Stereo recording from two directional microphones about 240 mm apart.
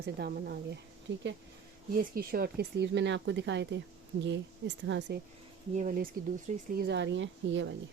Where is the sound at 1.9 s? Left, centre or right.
Right.